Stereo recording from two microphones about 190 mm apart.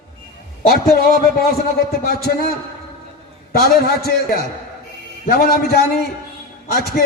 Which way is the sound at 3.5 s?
55° left (ahead or behind).